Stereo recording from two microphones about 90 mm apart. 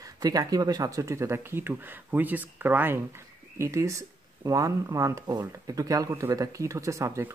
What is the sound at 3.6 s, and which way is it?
A man's voice, 35° right (ahead or behind).